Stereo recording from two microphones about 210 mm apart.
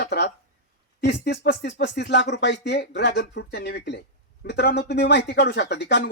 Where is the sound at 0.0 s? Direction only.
50° left (ahead or behind).